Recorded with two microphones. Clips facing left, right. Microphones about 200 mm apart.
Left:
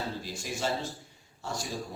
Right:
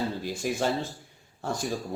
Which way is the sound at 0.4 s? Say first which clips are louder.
Right 5 dB; 55° right (ahead or behind).